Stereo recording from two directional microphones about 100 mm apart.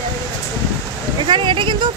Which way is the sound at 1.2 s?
50° right (ahead or behind).